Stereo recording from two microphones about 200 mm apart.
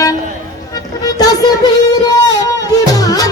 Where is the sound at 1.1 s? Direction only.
20° left (ahead or behind).